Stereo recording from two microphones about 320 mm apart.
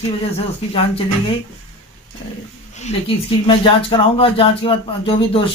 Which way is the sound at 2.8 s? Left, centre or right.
Centre.